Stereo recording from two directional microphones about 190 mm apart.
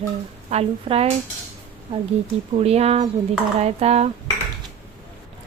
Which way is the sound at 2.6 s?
35° right (ahead or behind).